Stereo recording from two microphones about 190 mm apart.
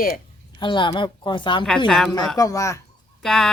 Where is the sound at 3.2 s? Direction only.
5° left (ahead or behind).